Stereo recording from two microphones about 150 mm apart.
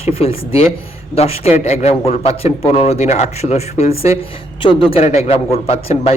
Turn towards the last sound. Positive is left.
turn(degrees=40)  # may be behind; listen again after turning